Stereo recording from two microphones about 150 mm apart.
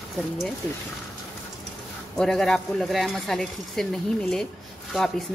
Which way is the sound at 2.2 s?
Centre (ahead or behind).